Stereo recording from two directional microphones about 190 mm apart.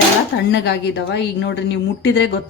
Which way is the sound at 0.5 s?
65° left (ahead or behind).